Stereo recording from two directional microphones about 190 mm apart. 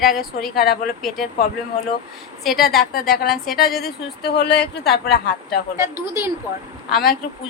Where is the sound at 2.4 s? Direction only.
Centre (ahead or behind).